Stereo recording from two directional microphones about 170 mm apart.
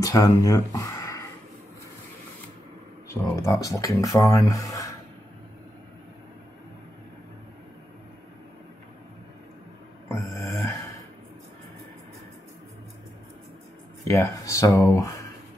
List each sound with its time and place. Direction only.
0.0 s speech: 20° left (ahead or behind)
3.1 s speech: 15° left (ahead or behind)
10.5 s gasp: 15° left (ahead or behind)
14.0 s speech: 15° left (ahead or behind)